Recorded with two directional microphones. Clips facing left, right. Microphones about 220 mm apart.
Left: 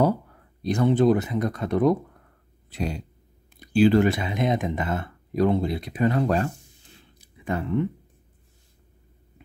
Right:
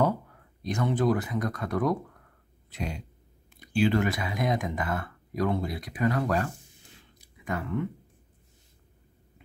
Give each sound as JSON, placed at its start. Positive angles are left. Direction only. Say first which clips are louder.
{"t": 0.6, "sound": "speech", "louder": "left 7 dB", "side_deg": 35}
{"t": 2.7, "sound": "throat clearing", "louder": "left 6 dB", "side_deg": 35}
{"t": 3.5, "sound": "speech", "louder": "left 7 dB", "side_deg": 35}
{"t": 7.2, "sound": "a sound", "louder": "left 5 dB", "side_deg": 30}